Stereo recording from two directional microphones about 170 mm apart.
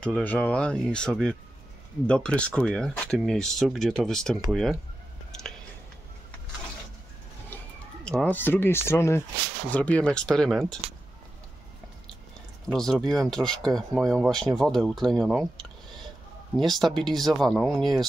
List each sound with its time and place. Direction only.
0.0 s speech: 10° left (ahead or behind)
7.4 s speech: 10° left (ahead or behind)
12.7 s speech: 5° left (ahead or behind)
16.5 s speech: centre (ahead or behind)